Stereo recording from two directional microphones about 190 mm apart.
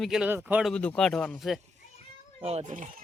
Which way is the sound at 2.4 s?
35° right (ahead or behind).